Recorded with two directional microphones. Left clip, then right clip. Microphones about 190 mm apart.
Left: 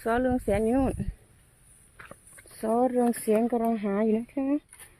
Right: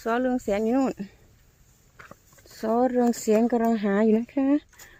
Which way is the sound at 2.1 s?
5° right (ahead or behind).